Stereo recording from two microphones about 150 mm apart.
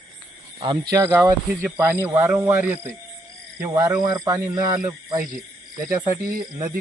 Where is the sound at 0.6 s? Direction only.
30° right (ahead or behind).